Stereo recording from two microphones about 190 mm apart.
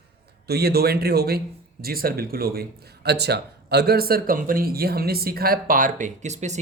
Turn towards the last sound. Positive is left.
turn(degrees=-40)  # may be behind; listen again after turning